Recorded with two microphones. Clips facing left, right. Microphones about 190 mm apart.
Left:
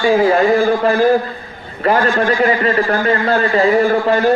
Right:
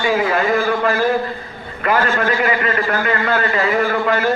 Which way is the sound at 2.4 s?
35° left (ahead or behind).